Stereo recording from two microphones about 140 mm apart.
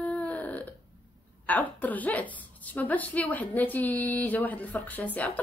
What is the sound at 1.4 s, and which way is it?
A woman's voice, 10° left (ahead or behind).